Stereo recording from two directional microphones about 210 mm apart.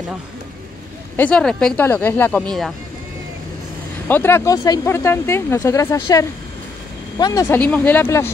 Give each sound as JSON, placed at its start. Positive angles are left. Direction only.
{"t": 1.1, "sound": "speech", "side_deg": 5}
{"t": 4.1, "sound": "speech", "side_deg": 10}